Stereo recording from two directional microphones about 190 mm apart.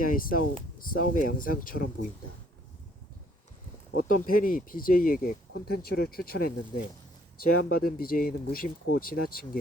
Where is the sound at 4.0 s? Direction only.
50° left (ahead or behind).